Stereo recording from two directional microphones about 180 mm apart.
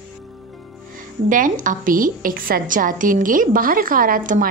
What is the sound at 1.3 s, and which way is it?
Speech, 45° right (ahead or behind).